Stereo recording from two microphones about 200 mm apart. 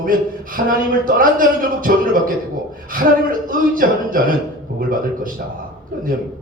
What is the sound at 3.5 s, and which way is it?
A man's voice, 45° right (ahead or behind).